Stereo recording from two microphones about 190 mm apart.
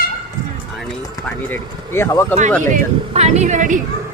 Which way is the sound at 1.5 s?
10° left (ahead or behind).